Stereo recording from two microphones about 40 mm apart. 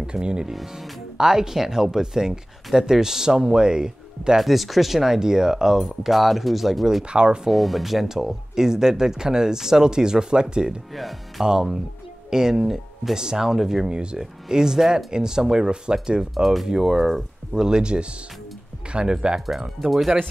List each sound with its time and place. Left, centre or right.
0.0 s speech: right
0.5 s speech: centre
4.4 s speech: centre
7.1 s speech: right
7.4 s speech: centre; by 10.7 s right
11.0 s speech: centre
11.4 s speech: centre
17.6 s speech: right